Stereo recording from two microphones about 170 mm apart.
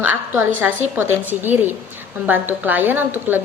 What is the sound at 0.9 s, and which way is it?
A woman's voice, 10° right (ahead or behind).